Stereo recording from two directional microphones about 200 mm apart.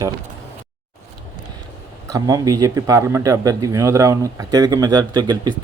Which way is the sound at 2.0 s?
15° right (ahead or behind).